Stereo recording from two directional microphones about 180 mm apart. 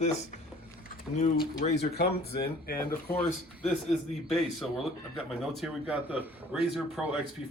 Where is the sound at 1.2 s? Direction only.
40° left (ahead or behind).